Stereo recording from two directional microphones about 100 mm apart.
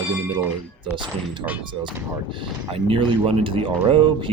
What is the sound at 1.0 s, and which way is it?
Speech, 50° right (ahead or behind).